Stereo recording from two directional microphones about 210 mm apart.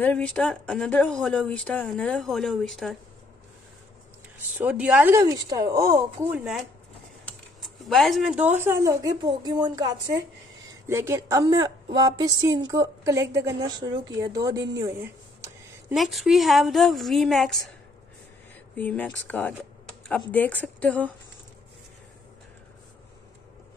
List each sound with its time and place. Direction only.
0.0 s a woman's voice: 5° left (ahead or behind)
4.4 s a woman's voice: 10° right (ahead or behind)
7.2 s speech: centre (ahead or behind); by 9.8 s 20° right (ahead or behind)
10.9 s a woman's voice: 15° right (ahead or behind)
15.9 s a woman's voice: centre (ahead or behind)
18.8 s speech: 10° left (ahead or behind)